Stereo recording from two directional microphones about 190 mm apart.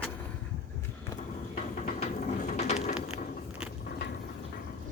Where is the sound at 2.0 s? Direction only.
35° left (ahead or behind).